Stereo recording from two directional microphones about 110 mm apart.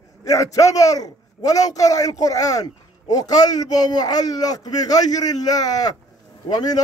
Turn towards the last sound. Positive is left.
turn(degrees=40)  # may be behind; listen again after turning